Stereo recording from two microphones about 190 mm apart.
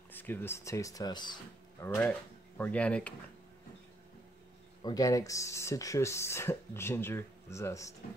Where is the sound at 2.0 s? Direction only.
10° left (ahead or behind).